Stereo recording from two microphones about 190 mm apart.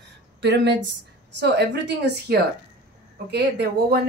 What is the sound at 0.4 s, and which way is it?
A woman's voice, 65° right (ahead or behind).